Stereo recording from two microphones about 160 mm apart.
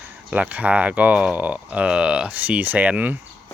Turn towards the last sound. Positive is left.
turn(degrees=-10)  # may be behind; listen again after turning